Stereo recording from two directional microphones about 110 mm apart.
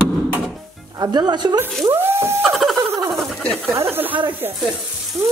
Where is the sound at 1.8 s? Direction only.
20° right (ahead or behind).